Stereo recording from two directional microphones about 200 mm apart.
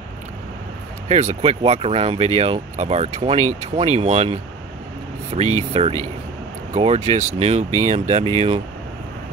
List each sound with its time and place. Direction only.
1.0 s speech: 30° right (ahead or behind)